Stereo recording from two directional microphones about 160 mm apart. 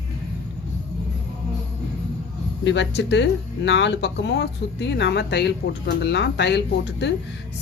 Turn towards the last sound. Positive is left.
turn(degrees=90)